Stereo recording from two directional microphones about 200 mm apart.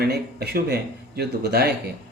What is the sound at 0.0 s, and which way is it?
Speech, 55° right (ahead or behind).